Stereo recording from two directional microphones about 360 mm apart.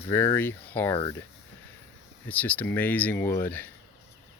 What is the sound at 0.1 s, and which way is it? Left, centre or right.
Speech, centre.